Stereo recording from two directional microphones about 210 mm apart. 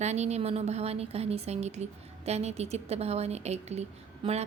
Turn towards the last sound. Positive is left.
turn(degrees=-30)  # may be behind; listen again after turning